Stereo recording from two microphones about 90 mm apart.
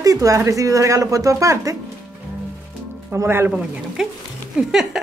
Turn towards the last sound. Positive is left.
turn(degrees=-5)  # may be behind; listen again after turning